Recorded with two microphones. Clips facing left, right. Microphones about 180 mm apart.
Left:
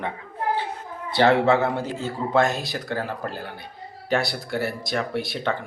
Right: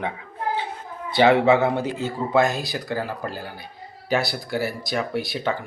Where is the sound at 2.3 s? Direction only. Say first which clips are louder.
Right 1 dB; centre (ahead or behind).